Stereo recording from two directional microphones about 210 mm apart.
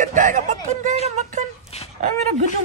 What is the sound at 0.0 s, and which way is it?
Speech, 40° right (ahead or behind).